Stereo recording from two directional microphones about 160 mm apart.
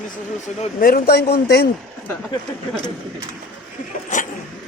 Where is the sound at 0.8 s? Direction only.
70° left (ahead or behind); by 1.7 s 85° left.